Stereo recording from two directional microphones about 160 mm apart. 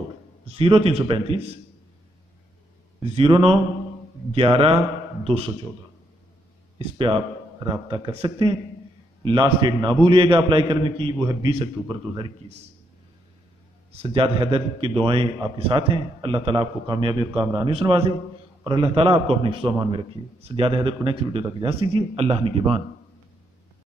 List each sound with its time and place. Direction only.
0.6 s a man's voice: 35° right (ahead or behind)
3.2 s a man's voice: 35° right (ahead or behind)
6.8 s a man's voice: 30° right (ahead or behind)
13.9 s a man's voice: 35° right (ahead or behind)